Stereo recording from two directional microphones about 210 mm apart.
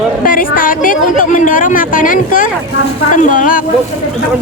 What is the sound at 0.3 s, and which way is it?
Speech, 40° left (ahead or behind).